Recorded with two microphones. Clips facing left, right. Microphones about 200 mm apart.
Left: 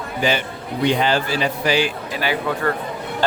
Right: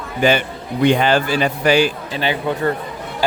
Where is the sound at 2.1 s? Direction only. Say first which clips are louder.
Even; 25° right (ahead or behind).